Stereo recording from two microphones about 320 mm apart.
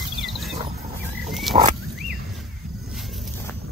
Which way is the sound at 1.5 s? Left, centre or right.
Centre.